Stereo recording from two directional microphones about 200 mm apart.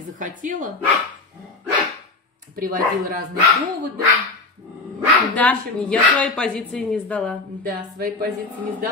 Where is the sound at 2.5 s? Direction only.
45° right (ahead or behind).